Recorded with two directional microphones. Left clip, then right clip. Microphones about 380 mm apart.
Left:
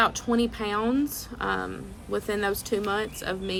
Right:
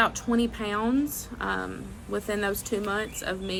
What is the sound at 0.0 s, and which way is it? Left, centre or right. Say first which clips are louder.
A woman's voice: left 1 dB; centre.